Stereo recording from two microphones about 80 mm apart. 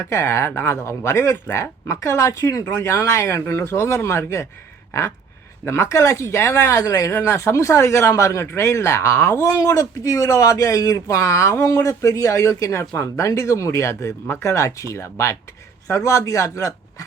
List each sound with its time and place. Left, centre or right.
0.1 s speech: left
5.6 s speech: left
7.1 s speech: left
9.6 s speech: left